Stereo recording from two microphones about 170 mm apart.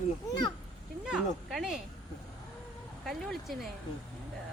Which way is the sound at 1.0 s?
5° right (ahead or behind).